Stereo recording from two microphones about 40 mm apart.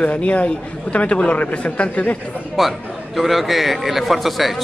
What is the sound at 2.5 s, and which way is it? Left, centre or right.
A man's voice, centre.